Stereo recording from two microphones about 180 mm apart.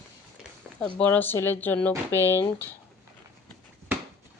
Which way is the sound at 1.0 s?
10° left (ahead or behind).